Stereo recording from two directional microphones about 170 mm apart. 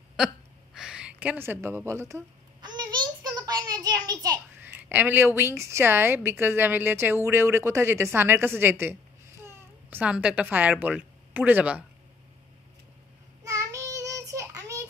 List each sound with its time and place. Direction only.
0.7 s a sound: 5° right (ahead or behind); by 4.4 s 25° right (ahead or behind)
4.7 s a woman's voice: 10° right (ahead or behind)
13.4 s child singing: 20° right (ahead or behind)